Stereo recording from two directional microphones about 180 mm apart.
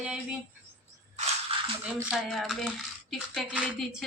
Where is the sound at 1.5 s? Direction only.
30° right (ahead or behind).